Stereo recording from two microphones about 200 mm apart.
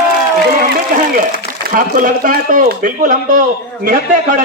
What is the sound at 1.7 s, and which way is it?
A man's voice, 40° right (ahead or behind).